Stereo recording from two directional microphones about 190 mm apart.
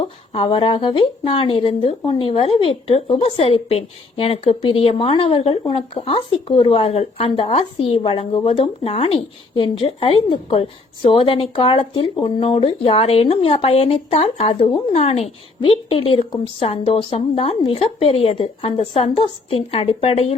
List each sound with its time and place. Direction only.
0.0 s speech: 25° left (ahead or behind)